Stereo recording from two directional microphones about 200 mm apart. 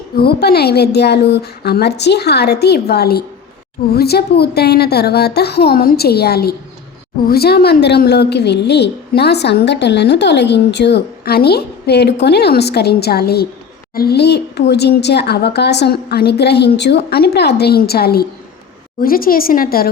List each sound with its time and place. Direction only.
0.2 s a woman's voice: 50° left (ahead or behind)